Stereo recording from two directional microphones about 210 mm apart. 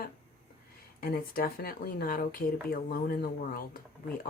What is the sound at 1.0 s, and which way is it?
Speech, 45° left (ahead or behind).